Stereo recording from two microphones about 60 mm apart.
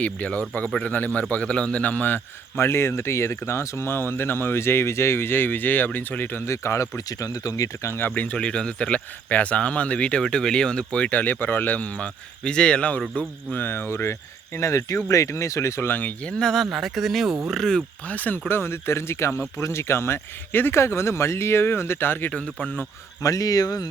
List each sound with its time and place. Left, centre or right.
0.0 s speech: left
2.6 s speech: left
6.4 s speech: left
8.0 s speech: left
8.4 s speech: centre
13.1 s speech: left
15.9 s speech: left
16.2 s speech: centre
16.6 s speech: centre
18.0 s speech: left
22.3 s speech: centre
23.2 s speech: left